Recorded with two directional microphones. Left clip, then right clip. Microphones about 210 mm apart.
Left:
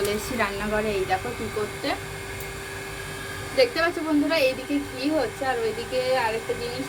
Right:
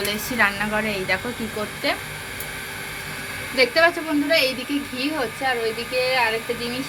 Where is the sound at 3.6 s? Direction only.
30° right (ahead or behind).